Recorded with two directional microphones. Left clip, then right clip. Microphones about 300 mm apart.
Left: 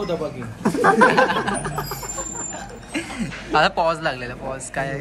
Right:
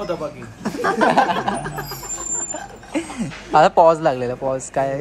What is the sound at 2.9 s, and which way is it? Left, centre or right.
Speech, right.